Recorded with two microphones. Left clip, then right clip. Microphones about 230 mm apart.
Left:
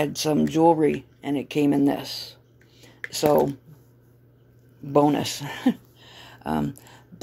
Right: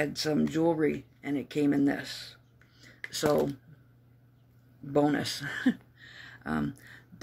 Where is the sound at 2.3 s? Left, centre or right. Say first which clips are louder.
Left 5 dB; left.